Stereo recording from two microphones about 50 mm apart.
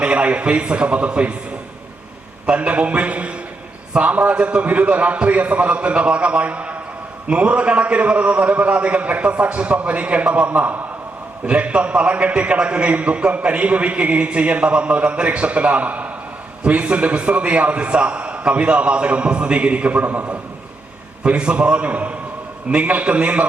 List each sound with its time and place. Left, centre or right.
0.0 s a man's voice: right
2.5 s a man's voice: right